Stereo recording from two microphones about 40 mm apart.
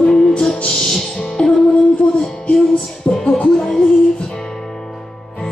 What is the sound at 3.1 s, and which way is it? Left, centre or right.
Music, centre.